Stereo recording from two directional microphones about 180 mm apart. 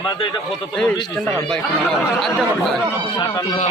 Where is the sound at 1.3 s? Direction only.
5° left (ahead or behind).